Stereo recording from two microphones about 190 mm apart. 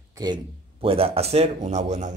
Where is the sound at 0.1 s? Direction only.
20° right (ahead or behind).